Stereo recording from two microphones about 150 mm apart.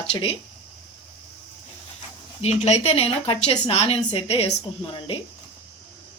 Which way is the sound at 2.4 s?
45° left (ahead or behind).